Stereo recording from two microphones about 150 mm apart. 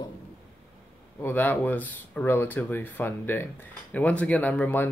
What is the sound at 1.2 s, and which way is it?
Speech, 15° left (ahead or behind).